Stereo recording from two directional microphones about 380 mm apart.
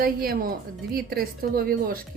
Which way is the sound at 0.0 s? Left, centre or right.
Right.